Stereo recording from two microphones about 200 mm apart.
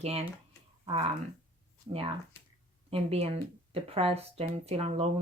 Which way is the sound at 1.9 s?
25° right (ahead or behind).